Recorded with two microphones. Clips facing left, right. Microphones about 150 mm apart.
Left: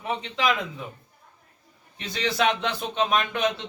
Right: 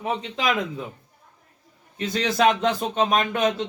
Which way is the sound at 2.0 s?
45° right (ahead or behind).